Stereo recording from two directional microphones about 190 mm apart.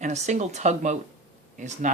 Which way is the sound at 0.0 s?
35° right (ahead or behind).